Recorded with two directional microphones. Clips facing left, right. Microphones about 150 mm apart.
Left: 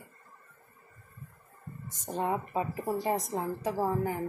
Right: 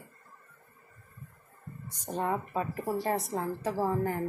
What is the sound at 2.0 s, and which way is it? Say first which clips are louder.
A woman's voice: even; 15° left (ahead or behind).